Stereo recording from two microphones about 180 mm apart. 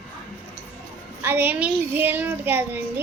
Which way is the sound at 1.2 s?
10° right (ahead or behind).